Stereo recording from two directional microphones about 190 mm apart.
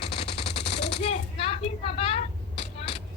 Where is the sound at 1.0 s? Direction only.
30° left (ahead or behind).